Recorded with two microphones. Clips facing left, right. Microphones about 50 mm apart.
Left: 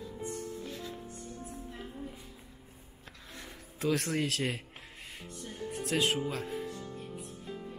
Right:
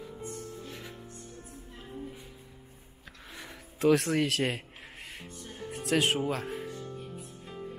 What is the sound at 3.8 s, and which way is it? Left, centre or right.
Speech, centre.